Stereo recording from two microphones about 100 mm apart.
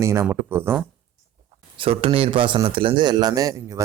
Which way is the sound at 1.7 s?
65° right (ahead or behind).